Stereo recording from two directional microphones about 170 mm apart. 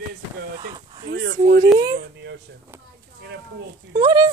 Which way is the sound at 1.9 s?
80° right.